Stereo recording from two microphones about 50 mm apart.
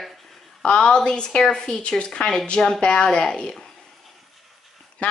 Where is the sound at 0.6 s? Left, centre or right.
Centre.